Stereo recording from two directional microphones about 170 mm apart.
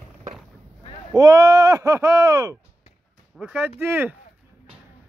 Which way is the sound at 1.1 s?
20° right (ahead or behind).